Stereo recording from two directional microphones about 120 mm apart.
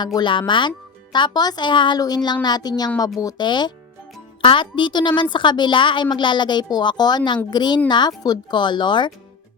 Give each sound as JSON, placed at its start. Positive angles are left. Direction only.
{"t": 0.0, "sound": "a woman's voice", "side_deg": 40}